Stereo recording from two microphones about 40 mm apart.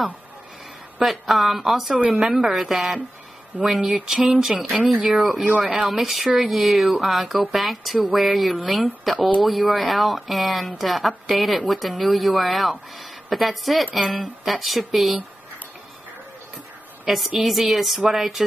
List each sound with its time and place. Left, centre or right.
1.0 s speech: centre
2.0 s a woman's voice: right
2.5 s speech: centre
3.8 s a woman's voice: centre
5.1 s speech: centre
17.1 s speech: centre